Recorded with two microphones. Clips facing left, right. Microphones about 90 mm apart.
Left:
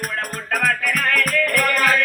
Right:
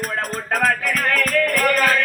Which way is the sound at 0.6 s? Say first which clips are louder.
Right 1 dB; 25° right (ahead or behind).